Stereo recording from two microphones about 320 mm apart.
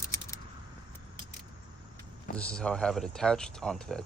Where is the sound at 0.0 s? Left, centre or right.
Centre.